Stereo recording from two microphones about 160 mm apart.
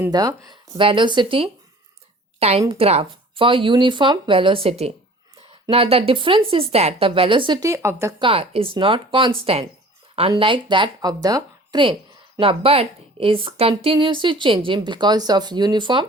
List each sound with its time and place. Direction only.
0.1 s speech: 25° right (ahead or behind)
8.2 s speech: 35° right (ahead or behind)